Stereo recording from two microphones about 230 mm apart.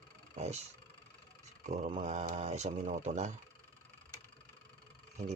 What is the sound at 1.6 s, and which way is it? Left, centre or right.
Speech, right.